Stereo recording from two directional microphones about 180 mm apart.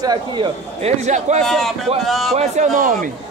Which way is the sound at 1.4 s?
Centre (ahead or behind).